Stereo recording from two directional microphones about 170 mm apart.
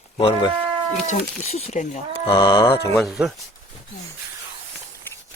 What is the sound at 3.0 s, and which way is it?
Speech, centre (ahead or behind).